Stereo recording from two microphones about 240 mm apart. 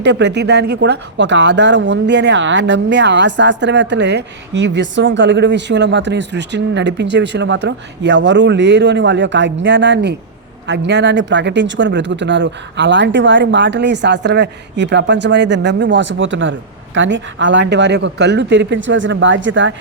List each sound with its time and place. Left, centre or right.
0.0 s speech: right